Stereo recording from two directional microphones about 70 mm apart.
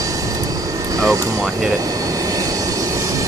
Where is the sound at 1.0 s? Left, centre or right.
Right.